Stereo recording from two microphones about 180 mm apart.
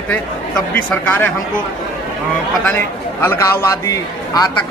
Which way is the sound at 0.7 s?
10° left (ahead or behind).